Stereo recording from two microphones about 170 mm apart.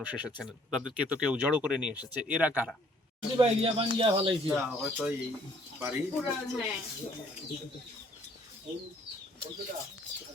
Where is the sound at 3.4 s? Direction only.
35° right (ahead or behind).